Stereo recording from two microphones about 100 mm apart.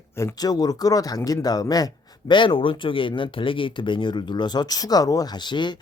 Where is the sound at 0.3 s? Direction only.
40° left (ahead or behind).